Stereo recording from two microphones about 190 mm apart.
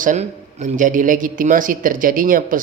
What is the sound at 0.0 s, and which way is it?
A man's voice, 40° right (ahead or behind).